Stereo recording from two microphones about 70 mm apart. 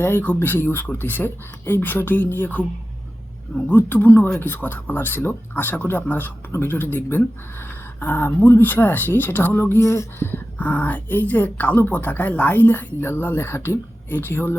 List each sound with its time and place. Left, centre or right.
0.0 s speech: left
3.7 s speech: left
10.6 s speech: left